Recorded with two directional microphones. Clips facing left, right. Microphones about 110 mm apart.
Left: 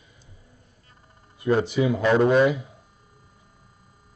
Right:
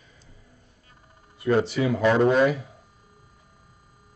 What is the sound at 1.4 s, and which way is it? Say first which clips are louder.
Speech: left 1 dB; 15° left (ahead or behind).